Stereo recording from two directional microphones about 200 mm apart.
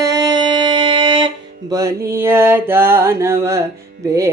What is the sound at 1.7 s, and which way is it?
Mantra, 15° right (ahead or behind).